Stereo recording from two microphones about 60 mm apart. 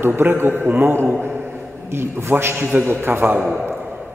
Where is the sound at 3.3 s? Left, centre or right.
Centre.